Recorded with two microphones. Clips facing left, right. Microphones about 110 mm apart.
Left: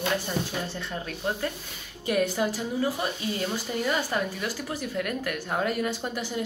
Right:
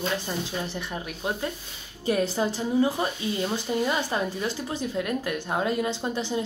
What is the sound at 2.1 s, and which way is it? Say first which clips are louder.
Speech: right 1 dB; 30° right (ahead or behind).